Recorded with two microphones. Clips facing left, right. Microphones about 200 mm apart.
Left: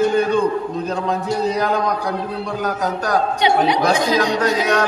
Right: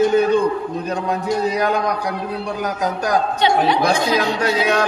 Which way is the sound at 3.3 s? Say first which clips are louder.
Left 1 dB; 15° left (ahead or behind).